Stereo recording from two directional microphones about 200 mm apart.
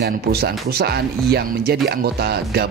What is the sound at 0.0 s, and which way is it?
Speech, 50° right (ahead or behind).